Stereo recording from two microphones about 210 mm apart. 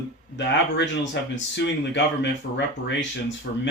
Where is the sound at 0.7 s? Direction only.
60° left (ahead or behind).